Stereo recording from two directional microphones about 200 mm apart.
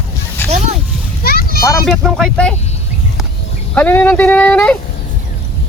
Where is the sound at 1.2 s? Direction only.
50° left (ahead or behind).